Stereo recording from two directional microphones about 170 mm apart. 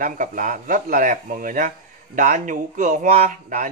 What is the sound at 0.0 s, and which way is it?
Speech, 55° right (ahead or behind).